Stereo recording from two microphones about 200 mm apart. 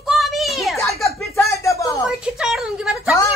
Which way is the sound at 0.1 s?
Centre (ahead or behind).